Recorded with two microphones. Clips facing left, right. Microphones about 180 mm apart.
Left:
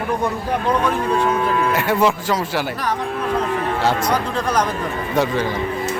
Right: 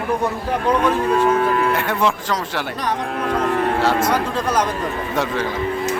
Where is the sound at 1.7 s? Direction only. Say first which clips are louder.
Left 2 dB; 5° left (ahead or behind).